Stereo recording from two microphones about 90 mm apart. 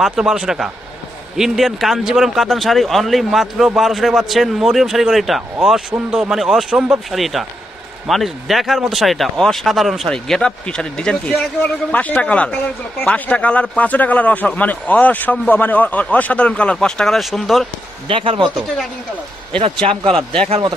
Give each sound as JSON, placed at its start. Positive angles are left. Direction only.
{"t": 0.0, "sound": "a man's voice", "side_deg": -10}
{"t": 18.0, "sound": "a man's voice", "side_deg": -80}
{"t": 19.6, "sound": "a man's voice", "side_deg": -90}
{"t": 20.1, "sound": "speech", "side_deg": 5}